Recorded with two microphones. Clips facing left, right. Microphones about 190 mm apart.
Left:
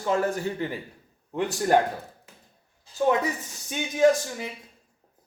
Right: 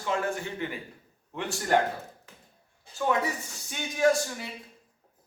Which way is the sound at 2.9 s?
55° right (ahead or behind).